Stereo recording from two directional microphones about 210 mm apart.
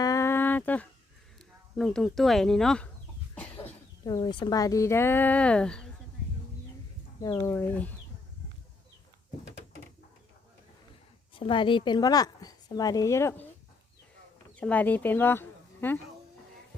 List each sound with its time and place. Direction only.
0.0 s a sound: 15° left (ahead or behind)
1.7 s speech: centre (ahead or behind)
3.3 s cough: 5° left (ahead or behind)
4.0 s a woman's voice: 20° left (ahead or behind); by 5.9 s 5° left (ahead or behind)
7.2 s a woman's voice: 15° left (ahead or behind)
11.3 s a woman's voice: 25° left (ahead or behind)
14.5 s speech: 5° left (ahead or behind)